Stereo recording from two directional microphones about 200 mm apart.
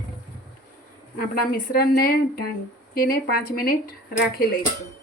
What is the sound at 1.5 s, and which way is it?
A woman's voice, 50° left (ahead or behind).